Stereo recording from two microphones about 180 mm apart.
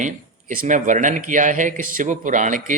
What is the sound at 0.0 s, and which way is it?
Speech, 45° right (ahead or behind).